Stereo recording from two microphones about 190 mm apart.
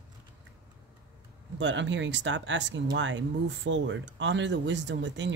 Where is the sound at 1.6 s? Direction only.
70° right (ahead or behind).